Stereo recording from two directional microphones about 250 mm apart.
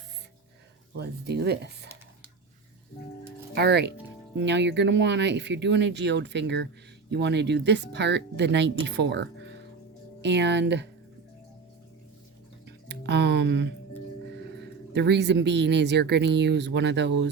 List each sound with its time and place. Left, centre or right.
0.9 s speech: right
3.5 s speech: right
12.9 s music: right
14.9 s speech: right